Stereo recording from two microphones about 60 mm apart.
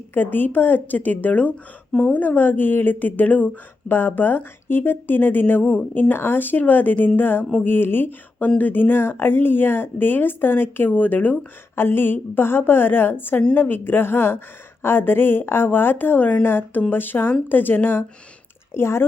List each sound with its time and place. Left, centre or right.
0.1 s speech: left
18.7 s speech: left